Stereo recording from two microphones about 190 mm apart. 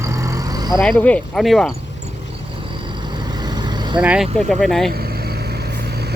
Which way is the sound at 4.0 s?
5° right (ahead or behind).